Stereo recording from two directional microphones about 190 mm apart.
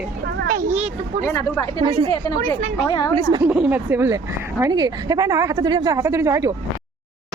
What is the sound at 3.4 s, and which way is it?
Speech, 5° right (ahead or behind).